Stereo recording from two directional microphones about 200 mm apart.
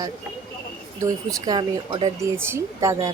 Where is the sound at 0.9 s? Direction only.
15° right (ahead or behind).